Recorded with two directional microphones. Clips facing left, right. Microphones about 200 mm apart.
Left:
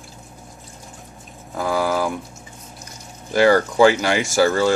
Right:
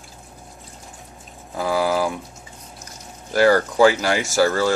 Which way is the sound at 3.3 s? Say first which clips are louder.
Left 1 dB; centre (ahead or behind).